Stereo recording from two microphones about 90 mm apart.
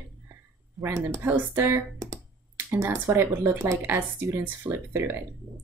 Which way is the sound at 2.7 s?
30° right (ahead or behind).